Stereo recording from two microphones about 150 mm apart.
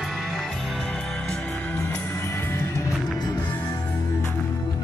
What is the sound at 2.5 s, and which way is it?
Music, 20° left (ahead or behind).